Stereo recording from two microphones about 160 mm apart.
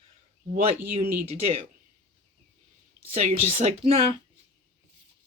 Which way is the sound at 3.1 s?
40° right (ahead or behind).